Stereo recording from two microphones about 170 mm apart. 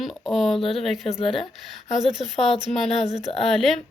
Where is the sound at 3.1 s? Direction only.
35° left (ahead or behind).